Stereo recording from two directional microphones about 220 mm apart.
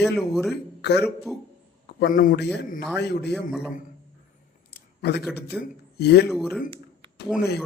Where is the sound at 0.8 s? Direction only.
50° left (ahead or behind).